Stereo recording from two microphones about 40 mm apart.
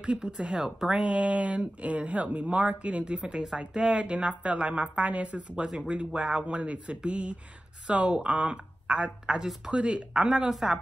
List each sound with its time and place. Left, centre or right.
0.0 s speech: right
0.6 s speech: centre
0.8 s speech: right